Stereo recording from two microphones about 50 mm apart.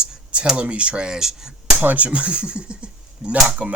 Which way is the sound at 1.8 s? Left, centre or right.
Right.